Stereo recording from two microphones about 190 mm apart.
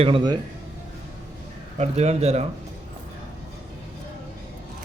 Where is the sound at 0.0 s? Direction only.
25° right (ahead or behind).